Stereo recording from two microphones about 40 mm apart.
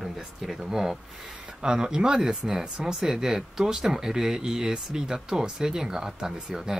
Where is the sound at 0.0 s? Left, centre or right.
Centre.